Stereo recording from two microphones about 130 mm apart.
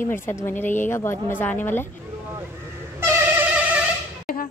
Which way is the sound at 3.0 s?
10° right (ahead or behind).